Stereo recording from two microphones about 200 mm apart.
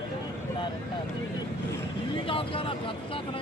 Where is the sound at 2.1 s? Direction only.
25° left (ahead or behind).